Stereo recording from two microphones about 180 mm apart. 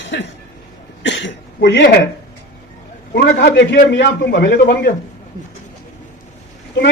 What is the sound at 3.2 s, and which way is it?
A man's voice, 70° left (ahead or behind).